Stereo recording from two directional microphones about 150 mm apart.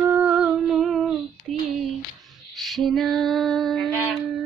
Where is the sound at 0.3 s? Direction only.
5° right (ahead or behind).